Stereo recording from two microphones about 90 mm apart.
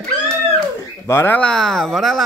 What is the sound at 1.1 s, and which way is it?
Speech, 25° left (ahead or behind).